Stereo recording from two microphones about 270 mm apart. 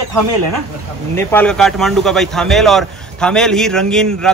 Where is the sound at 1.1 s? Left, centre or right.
Centre.